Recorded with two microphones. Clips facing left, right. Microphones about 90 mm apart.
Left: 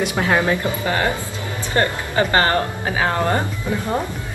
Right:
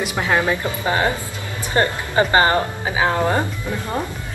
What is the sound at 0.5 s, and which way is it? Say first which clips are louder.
Speech: even; 20° right (ahead or behind).